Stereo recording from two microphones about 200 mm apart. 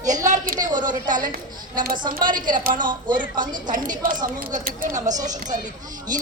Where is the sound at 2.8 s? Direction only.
20° right (ahead or behind).